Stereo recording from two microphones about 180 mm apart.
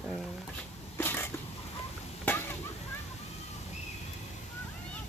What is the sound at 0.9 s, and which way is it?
Cat, 10° left (ahead or behind).